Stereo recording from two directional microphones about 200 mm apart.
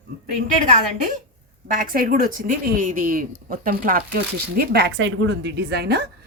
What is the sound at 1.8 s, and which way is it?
Speech, 45° right (ahead or behind).